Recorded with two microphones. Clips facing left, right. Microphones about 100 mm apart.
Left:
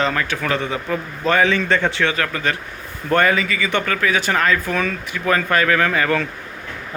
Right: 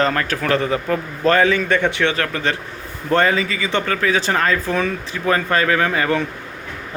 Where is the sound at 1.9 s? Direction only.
30° right (ahead or behind).